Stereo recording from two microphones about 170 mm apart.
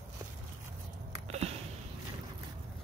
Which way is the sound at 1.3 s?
40° right (ahead or behind).